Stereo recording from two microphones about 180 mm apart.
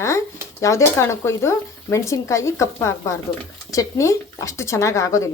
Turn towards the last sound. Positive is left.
turn(degrees=15)  # may be behind; listen again after turning